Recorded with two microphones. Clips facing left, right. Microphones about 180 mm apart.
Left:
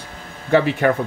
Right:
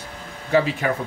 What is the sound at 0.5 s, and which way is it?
Speech, 65° left (ahead or behind).